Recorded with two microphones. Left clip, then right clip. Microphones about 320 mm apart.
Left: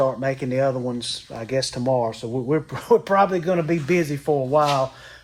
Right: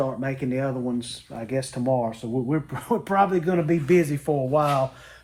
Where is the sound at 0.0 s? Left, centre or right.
Left.